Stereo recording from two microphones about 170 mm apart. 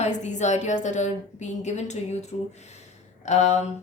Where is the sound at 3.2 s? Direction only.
40° left (ahead or behind).